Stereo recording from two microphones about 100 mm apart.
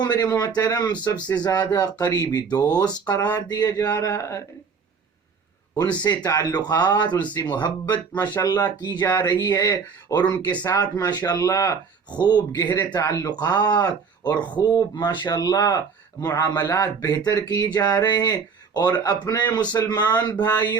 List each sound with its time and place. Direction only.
0.0 s speech: 45° left (ahead or behind)
5.7 s speech: 40° left (ahead or behind)
10.3 s speech: 15° left (ahead or behind)
10.6 s speech: 40° left (ahead or behind)
12.9 s speech: 35° left (ahead or behind)